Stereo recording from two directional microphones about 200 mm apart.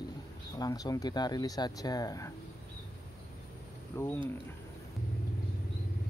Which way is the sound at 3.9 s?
15° left (ahead or behind).